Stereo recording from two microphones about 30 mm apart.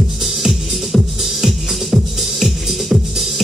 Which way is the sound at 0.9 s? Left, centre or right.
Centre.